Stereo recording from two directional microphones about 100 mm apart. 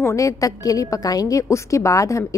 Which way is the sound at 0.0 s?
30° left (ahead or behind).